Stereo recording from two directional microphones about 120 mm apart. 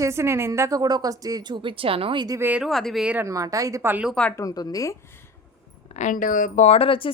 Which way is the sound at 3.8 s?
15° right (ahead or behind).